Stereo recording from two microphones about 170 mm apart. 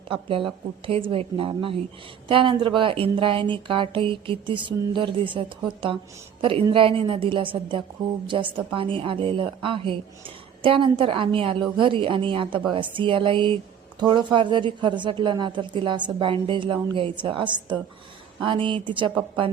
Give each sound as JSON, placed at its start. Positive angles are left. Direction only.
{"t": 0.1, "sound": "a woman's voice", "side_deg": -30}